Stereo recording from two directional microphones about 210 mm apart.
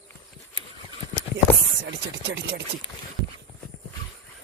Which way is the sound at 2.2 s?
55° right (ahead or behind).